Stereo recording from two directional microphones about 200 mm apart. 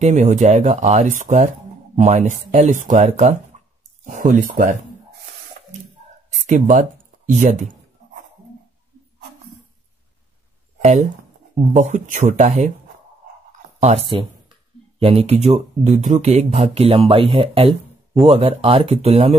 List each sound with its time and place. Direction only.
0.0 s speech: 35° right (ahead or behind)
6.4 s writing: 40° right (ahead or behind)
10.8 s speech: 35° right (ahead or behind)
13.5 s a sound: 30° right (ahead or behind)
15.0 s speech: 30° right (ahead or behind)